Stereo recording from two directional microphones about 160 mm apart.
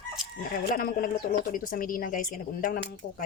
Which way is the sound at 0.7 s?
60° left (ahead or behind).